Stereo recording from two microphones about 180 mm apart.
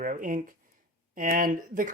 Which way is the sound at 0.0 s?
50° right (ahead or behind).